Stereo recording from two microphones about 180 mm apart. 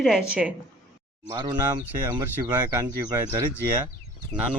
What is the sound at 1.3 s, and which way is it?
Speech, 25° right (ahead or behind).